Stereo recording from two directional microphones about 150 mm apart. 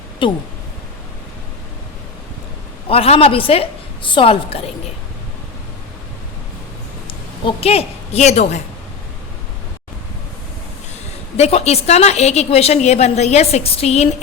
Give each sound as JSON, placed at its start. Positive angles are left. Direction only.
{"t": 0.2, "sound": "a woman's voice", "side_deg": 35}
{"t": 2.9, "sound": "a woman's voice", "side_deg": 40}
{"t": 7.4, "sound": "a woman's voice", "side_deg": 40}
{"t": 11.3, "sound": "a woman's voice", "side_deg": 45}